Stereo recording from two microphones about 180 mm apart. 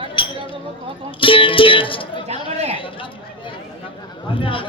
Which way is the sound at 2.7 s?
30° left (ahead or behind).